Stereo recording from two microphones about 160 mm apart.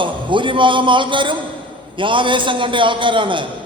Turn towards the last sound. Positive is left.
turn(degrees=-30)  # may be behind; listen again after turning